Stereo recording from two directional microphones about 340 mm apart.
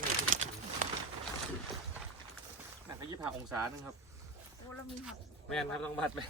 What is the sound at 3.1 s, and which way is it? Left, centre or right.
Speech, centre.